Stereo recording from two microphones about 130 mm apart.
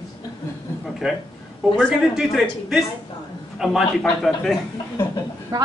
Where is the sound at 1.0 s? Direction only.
5° right (ahead or behind).